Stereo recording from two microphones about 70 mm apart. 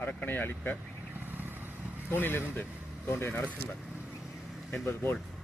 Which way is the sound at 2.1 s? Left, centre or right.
Left.